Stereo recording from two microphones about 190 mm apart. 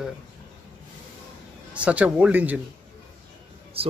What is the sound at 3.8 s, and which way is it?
Speech, 30° right (ahead or behind).